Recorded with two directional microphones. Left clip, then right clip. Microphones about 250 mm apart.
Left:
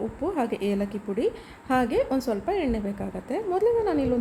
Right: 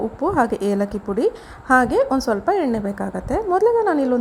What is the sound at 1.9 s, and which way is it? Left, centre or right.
Speech, centre.